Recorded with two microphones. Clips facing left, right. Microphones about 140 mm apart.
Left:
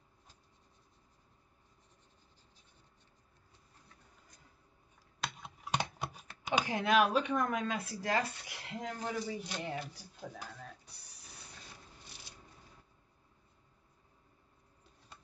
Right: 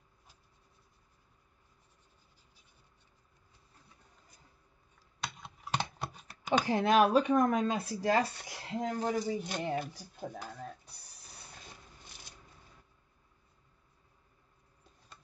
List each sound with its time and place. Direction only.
5.2 s computer keyboard: centre (ahead or behind)
6.6 s speech: 35° right (ahead or behind)